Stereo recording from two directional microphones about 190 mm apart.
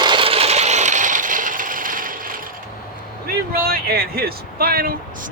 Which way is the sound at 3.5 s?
50° right (ahead or behind).